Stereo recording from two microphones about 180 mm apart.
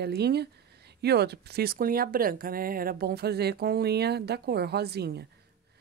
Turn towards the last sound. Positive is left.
turn(degrees=-65)  # may be behind; listen again after turning